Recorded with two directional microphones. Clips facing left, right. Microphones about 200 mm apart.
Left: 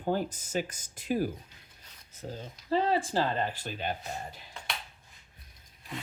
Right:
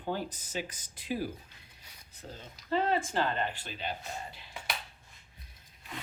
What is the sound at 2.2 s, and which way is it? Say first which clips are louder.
Speech: left 4 dB; 30° left (ahead or behind).